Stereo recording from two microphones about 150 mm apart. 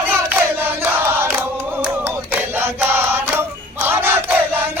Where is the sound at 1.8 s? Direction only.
10° right (ahead or behind).